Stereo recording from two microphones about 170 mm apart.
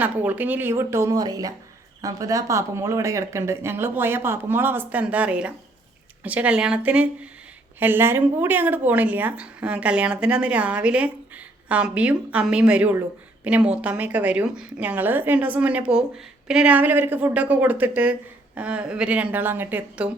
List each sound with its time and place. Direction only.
0.0 s speech: 10° right (ahead or behind)